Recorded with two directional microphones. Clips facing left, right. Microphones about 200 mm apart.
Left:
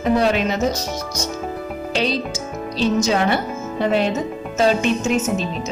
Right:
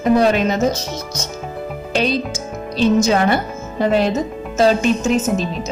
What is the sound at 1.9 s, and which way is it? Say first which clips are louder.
Music: right 3 dB; 50° right (ahead or behind).